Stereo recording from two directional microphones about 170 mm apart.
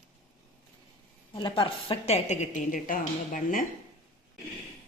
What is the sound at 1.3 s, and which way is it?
A woman's voice, 30° left (ahead or behind).